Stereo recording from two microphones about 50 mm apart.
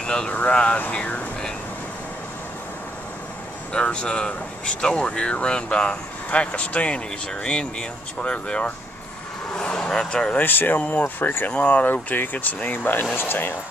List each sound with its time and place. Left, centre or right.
0.0 s vehicle: centre
0.3 s speech: left
3.7 s speech: left
8.2 s speech: left
9.5 s vehicle: centre
10.3 s speech: left
11.5 s speech: left
11.8 s speech: left